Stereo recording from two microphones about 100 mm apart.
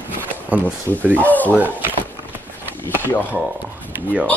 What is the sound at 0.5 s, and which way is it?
Speech, 15° right (ahead or behind).